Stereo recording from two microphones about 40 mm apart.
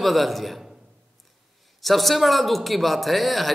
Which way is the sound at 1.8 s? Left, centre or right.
Centre.